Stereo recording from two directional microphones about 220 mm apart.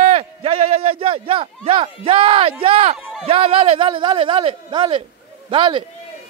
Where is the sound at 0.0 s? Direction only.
25° right (ahead or behind).